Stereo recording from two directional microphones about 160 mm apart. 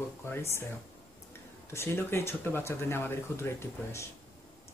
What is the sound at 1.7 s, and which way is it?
A man's voice, 15° left (ahead or behind).